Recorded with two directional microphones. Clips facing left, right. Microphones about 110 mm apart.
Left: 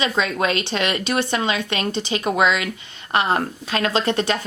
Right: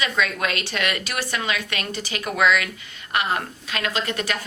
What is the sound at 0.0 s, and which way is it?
Speech, 25° left (ahead or behind).